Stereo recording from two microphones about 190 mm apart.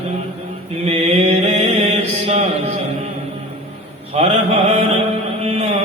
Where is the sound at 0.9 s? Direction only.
30° right (ahead or behind).